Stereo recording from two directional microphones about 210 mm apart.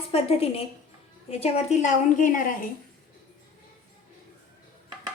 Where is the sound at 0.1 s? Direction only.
30° left (ahead or behind).